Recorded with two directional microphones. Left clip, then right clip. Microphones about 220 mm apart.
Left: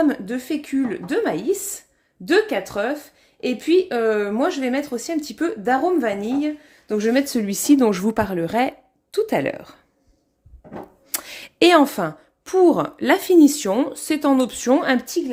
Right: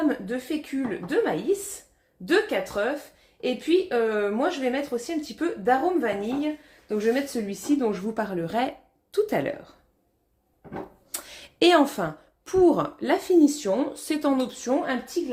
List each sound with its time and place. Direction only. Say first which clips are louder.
0.0 s speech: left 5 dB; 55° left (ahead or behind)
8.1 s a woman's voice: left 6 dB; 35° left (ahead or behind)
11.1 s a woman's voice: left 7 dB; 35° left (ahead or behind)
15.2 s a woman's voice: left 5 dB; 65° left (ahead or behind)